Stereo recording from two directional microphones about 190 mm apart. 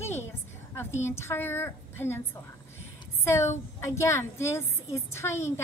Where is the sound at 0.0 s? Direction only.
10° left (ahead or behind).